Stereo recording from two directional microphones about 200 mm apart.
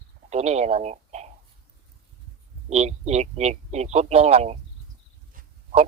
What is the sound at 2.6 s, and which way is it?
A man's voice, 35° right (ahead or behind).